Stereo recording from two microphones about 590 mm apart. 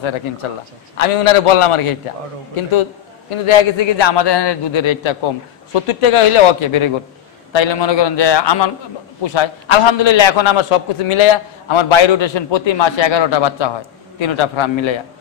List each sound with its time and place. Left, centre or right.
0.9 s a man's voice: left